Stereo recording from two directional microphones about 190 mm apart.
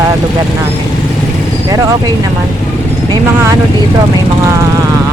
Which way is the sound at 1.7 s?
20° right (ahead or behind).